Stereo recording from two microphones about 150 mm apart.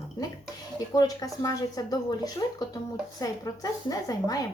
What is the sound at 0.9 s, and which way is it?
Speech, 25° left (ahead or behind).